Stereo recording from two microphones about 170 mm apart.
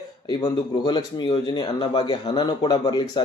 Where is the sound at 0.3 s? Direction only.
25° left (ahead or behind).